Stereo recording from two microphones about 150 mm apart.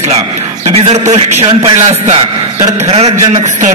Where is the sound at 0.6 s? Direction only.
45° right (ahead or behind).